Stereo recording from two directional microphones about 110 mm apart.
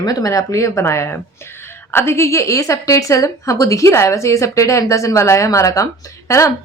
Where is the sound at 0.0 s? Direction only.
35° left (ahead or behind).